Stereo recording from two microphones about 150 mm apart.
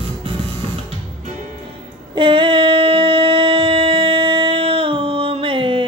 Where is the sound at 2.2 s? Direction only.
35° right (ahead or behind).